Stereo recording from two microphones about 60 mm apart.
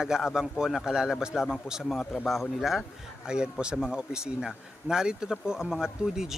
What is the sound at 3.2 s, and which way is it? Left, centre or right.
Speech, centre.